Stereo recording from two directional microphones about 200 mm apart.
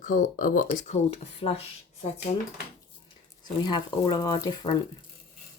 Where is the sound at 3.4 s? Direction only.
20° left (ahead or behind).